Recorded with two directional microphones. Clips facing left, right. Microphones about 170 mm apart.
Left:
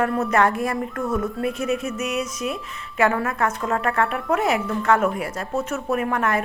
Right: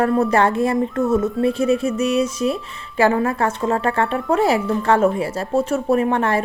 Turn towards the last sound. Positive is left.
turn(degrees=-30)  # may be behind; listen again after turning